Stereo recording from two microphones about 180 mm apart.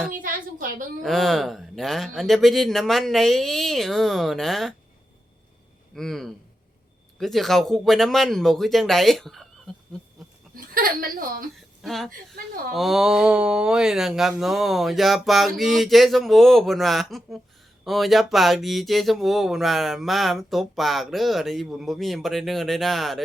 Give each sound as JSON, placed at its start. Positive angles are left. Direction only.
{"t": 0.1, "sound": "a woman's voice", "side_deg": -50}
{"t": 1.0, "sound": "speech", "side_deg": 0}
{"t": 5.9, "sound": "speech", "side_deg": 0}
{"t": 10.5, "sound": "speech", "side_deg": -55}
{"t": 11.8, "sound": "speech", "side_deg": 0}